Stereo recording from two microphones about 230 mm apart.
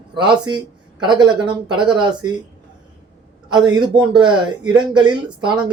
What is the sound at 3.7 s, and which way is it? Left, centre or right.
Speech, centre.